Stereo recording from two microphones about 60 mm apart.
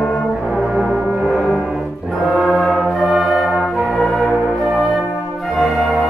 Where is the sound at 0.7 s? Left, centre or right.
Centre.